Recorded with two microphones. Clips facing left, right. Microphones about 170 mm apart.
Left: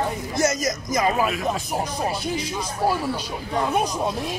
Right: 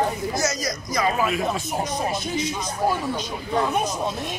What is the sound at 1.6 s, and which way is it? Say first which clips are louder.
Speech: even; 35° left (ahead or behind).